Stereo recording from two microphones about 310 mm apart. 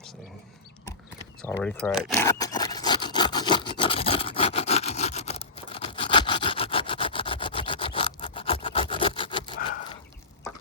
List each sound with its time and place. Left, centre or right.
1.4 s rub: centre